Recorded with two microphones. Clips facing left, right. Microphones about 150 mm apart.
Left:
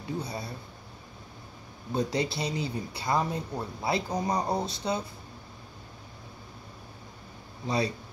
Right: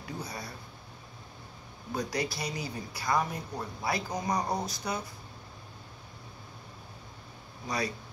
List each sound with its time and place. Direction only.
0.0 s speech: 25° left (ahead or behind)
2.0 s speech: 25° left (ahead or behind)
7.6 s speech: 25° left (ahead or behind)